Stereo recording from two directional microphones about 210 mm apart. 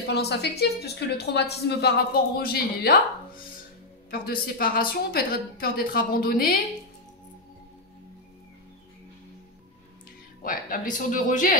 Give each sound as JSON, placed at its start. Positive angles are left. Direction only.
{"t": 0.0, "sound": "a woman's voice", "side_deg": 50}
{"t": 4.1, "sound": "a woman's voice", "side_deg": 45}
{"t": 10.4, "sound": "speech", "side_deg": 40}